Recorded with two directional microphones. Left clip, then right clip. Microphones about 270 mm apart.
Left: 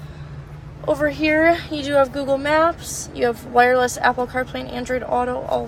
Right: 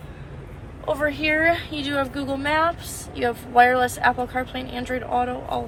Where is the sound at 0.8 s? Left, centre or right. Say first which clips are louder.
Left 3 dB; centre.